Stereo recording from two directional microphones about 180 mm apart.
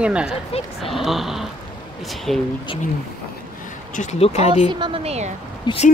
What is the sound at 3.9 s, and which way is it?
Speech, 40° left (ahead or behind).